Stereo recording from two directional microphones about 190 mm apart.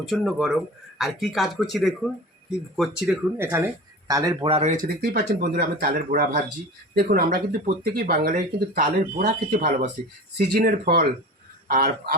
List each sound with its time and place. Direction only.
0.0 s speech: centre (ahead or behind)
3.3 s speech: 10° right (ahead or behind)
4.4 s speech: 35° right (ahead or behind)
4.9 s speech: 55° right (ahead or behind)